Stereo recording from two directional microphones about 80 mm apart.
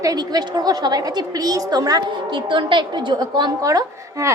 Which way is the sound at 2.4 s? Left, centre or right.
Right.